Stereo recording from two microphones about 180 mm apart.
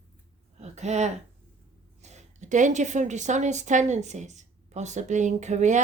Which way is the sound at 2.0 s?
40° right (ahead or behind).